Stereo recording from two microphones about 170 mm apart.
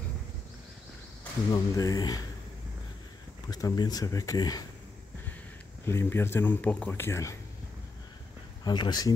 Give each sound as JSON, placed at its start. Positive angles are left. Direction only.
{"t": 1.5, "sound": "speech", "side_deg": 20}
{"t": 3.4, "sound": "speech", "side_deg": 20}
{"t": 5.9, "sound": "speech", "side_deg": 15}
{"t": 8.6, "sound": "speech", "side_deg": 25}